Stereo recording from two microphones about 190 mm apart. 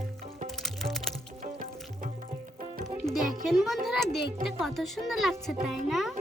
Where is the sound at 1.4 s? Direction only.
45° right (ahead or behind).